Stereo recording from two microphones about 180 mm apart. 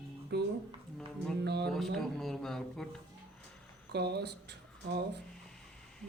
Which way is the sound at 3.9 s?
65° right (ahead or behind).